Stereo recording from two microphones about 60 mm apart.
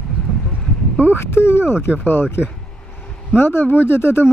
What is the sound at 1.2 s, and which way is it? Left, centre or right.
Speech, left.